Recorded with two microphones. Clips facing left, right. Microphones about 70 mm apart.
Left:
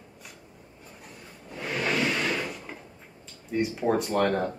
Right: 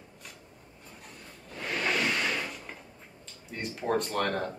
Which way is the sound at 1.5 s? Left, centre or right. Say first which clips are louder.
Left 2 dB; centre.